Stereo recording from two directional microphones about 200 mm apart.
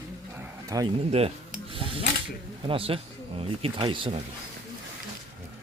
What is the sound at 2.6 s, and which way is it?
Speech, 25° right (ahead or behind).